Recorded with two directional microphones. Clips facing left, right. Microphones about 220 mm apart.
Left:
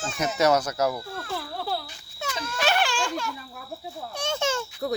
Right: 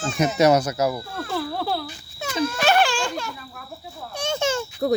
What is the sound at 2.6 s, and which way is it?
Speech, 50° right (ahead or behind).